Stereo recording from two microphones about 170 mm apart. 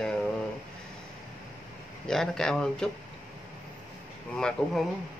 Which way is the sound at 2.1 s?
5° left (ahead or behind).